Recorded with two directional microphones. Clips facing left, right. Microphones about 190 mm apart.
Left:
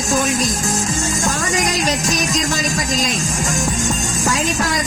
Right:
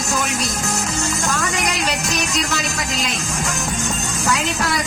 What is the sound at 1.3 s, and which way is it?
A woman's voice, 40° left (ahead or behind).